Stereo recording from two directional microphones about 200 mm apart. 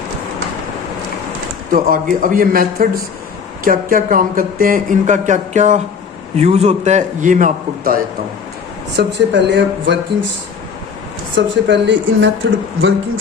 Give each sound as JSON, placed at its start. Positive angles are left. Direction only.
{"t": 1.7, "sound": "a man's voice", "side_deg": -45}
{"t": 9.0, "sound": "speech", "side_deg": -60}
{"t": 11.3, "sound": "speech", "side_deg": -65}